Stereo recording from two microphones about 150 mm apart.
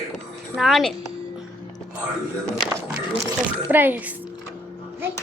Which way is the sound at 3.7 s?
15° right (ahead or behind).